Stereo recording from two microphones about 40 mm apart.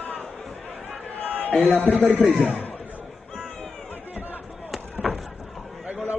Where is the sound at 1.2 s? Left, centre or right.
Left.